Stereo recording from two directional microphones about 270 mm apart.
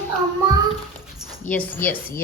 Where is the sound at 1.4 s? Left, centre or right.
Centre.